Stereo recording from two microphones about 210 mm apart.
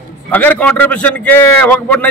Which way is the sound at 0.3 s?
10° left (ahead or behind).